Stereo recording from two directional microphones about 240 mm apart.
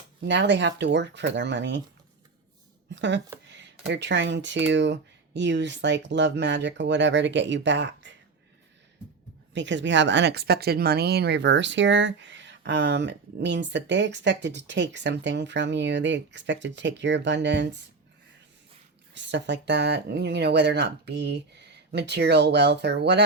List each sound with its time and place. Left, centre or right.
0.2 s speech: right
2.9 s a sound: right
3.4 s speech: right
9.6 s speech: right
19.1 s speech: right